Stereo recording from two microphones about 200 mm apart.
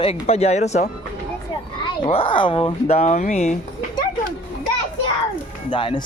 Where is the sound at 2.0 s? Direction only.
25° left (ahead or behind).